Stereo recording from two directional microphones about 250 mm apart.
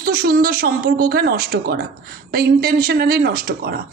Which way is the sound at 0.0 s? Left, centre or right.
Right.